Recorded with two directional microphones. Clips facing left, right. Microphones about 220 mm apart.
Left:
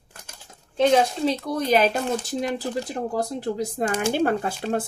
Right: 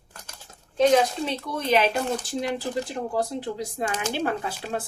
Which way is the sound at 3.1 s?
45° left (ahead or behind).